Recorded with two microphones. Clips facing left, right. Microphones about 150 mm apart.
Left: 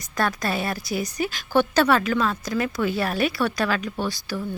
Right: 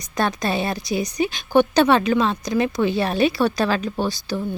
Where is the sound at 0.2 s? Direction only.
20° right (ahead or behind).